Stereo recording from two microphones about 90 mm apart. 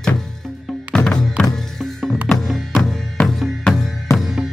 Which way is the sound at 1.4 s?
5° left (ahead or behind).